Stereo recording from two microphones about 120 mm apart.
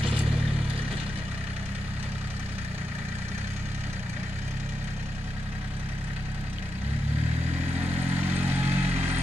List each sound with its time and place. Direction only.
8.4 s vehicle: 15° right (ahead or behind)